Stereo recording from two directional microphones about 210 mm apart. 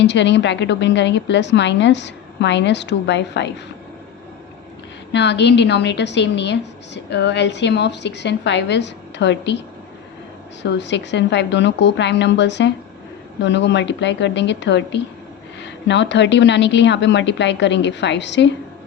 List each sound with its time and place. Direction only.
0.0 s a woman's voice: 55° left (ahead or behind)
5.1 s a woman's voice: 55° left (ahead or behind)
10.6 s a woman's voice: 55° left (ahead or behind)